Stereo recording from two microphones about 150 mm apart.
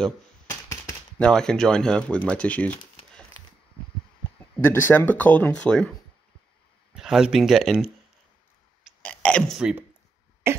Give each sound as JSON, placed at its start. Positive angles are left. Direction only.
{"t": 0.5, "sound": "typewriter", "side_deg": 20}
{"t": 1.1, "sound": "speech", "side_deg": 5}
{"t": 4.6, "sound": "speech", "side_deg": 15}
{"t": 9.0, "sound": "a sound", "side_deg": 10}
{"t": 9.6, "sound": "speech", "side_deg": -5}